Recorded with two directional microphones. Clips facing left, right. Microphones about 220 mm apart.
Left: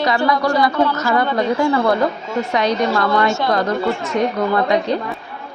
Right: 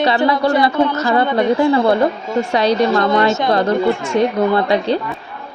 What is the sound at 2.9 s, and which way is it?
A woman's voice, 20° right (ahead or behind).